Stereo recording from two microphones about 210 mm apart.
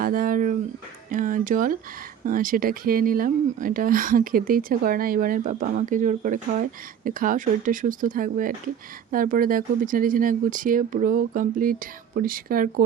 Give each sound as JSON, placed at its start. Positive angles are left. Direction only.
{"t": 0.0, "sound": "speech", "side_deg": -40}